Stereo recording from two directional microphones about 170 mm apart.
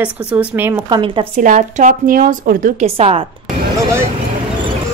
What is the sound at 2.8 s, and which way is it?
Speech, 35° right (ahead or behind).